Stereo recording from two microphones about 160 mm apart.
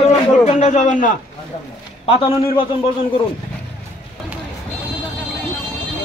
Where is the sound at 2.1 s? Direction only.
35° left (ahead or behind).